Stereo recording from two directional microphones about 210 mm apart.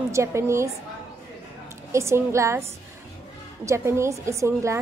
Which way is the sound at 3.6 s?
15° right (ahead or behind).